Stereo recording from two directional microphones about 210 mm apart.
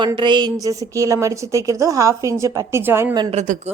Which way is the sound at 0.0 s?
20° right (ahead or behind).